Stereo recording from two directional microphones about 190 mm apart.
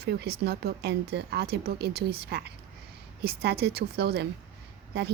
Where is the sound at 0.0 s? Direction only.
60° right (ahead or behind).